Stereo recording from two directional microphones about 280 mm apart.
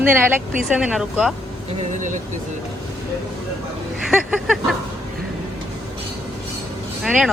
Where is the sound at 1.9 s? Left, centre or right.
Right.